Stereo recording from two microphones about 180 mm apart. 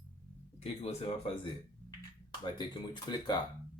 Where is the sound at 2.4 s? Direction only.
25° left (ahead or behind).